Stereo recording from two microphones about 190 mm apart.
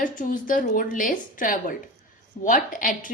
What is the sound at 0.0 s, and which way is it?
Speech, 45° left (ahead or behind).